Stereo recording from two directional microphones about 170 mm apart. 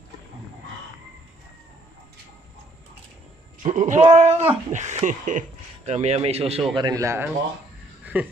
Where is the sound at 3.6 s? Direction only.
45° right (ahead or behind).